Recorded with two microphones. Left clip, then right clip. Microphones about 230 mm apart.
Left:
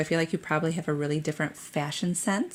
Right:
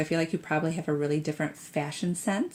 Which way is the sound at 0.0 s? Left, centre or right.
Left.